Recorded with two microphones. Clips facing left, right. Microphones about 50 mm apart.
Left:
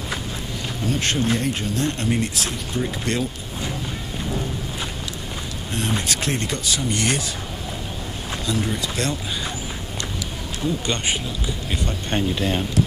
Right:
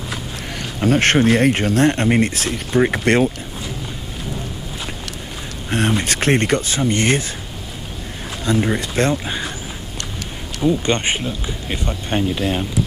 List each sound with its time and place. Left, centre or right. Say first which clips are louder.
0.5 s speech: right 9 dB; right
5.7 s speech: right 6 dB; right
8.5 s speech: right 7 dB; right
10.9 s speech: right 5 dB; right
12.1 s speech: right 3 dB; centre